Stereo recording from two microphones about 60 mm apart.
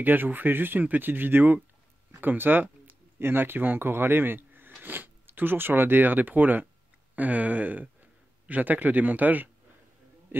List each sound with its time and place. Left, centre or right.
0.0 s a man's voice: right